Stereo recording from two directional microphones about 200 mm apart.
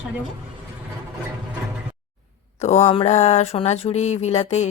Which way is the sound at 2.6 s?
35° left (ahead or behind).